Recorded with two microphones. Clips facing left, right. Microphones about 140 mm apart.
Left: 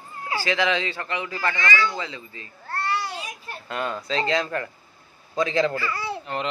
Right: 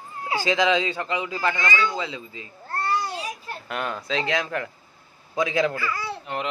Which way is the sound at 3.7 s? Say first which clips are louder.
Left 1 dB; centre (ahead or behind).